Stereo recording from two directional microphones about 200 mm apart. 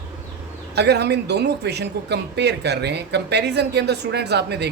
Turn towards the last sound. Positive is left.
turn(degrees=-55)  # may be behind; listen again after turning